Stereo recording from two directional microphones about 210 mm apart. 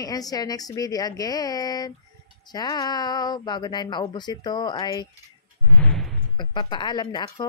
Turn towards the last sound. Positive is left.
turn(degrees=20)  # may be behind; listen again after turning